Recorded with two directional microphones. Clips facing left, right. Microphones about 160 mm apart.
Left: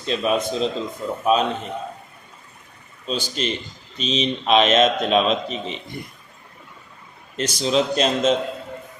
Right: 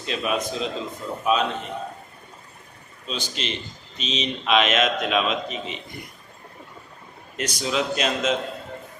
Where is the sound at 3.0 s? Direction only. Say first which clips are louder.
Left 5 dB; 40° left (ahead or behind).